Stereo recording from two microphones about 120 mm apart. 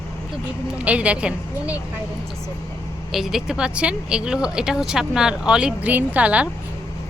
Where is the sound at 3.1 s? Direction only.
5° right (ahead or behind).